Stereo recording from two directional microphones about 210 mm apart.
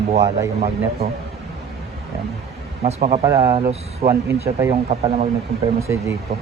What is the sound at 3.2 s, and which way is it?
Speech, 15° right (ahead or behind).